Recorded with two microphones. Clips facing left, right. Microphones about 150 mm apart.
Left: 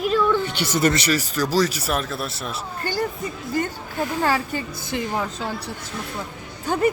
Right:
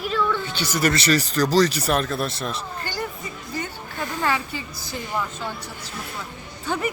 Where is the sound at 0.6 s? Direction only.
25° left (ahead or behind).